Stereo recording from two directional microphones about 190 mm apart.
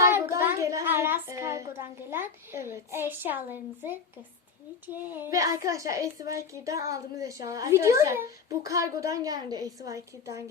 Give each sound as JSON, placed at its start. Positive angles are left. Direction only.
{"t": 0.0, "sound": "a child's voice", "side_deg": -15}